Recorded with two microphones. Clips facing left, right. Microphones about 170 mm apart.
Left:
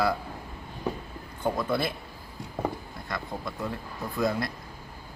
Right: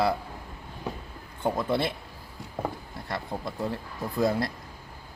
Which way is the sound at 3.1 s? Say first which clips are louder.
Right 1 dB; 30° right (ahead or behind).